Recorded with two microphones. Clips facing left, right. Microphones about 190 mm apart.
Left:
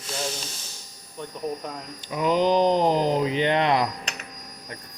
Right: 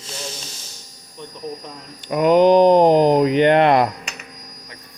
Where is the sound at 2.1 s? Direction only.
60° right (ahead or behind).